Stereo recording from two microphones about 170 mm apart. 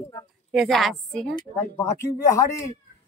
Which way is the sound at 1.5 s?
15° left (ahead or behind).